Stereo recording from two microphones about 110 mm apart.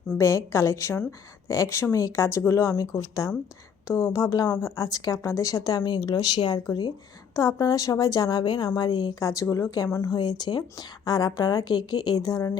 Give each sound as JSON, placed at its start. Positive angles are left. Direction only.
{"t": 0.2, "sound": "a woman's voice", "side_deg": 25}